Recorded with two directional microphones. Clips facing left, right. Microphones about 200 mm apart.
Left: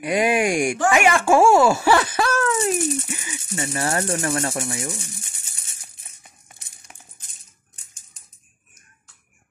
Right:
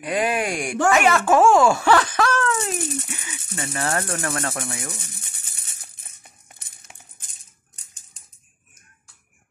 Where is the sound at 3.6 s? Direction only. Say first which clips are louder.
Left 2 dB; 10° left (ahead or behind).